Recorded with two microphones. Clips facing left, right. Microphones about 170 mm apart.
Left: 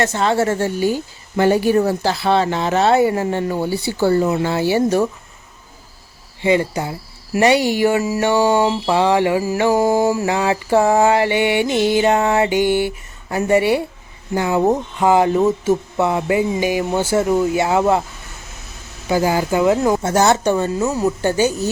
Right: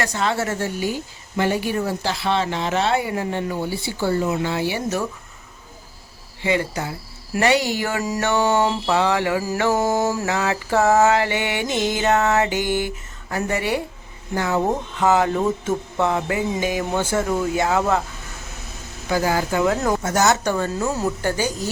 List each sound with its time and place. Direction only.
0.0 s a woman's voice: 30° left (ahead or behind)
6.4 s a woman's voice: 20° left (ahead or behind)
7.3 s mantra: 15° left (ahead or behind)
8.9 s a woman's voice: 20° left (ahead or behind)
9.6 s mantra: 10° left (ahead or behind)
19.0 s mantra: 15° left (ahead or behind)
20.0 s a woman's voice: 30° left (ahead or behind)
20.8 s speech: 5° left (ahead or behind)
21.2 s a woman's voice: 20° left (ahead or behind)